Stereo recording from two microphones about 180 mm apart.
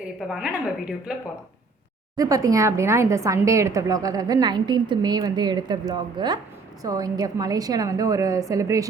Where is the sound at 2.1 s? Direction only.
20° right (ahead or behind).